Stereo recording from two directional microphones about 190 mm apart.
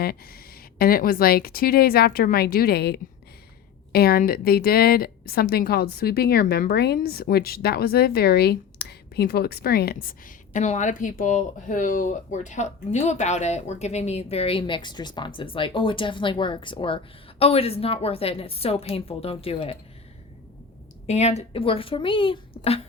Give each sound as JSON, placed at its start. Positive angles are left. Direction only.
{"t": 0.0, "sound": "a woman's voice", "side_deg": 55}
{"t": 21.1, "sound": "speech", "side_deg": 35}